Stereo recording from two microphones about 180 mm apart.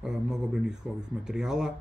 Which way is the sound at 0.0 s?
5° right (ahead or behind).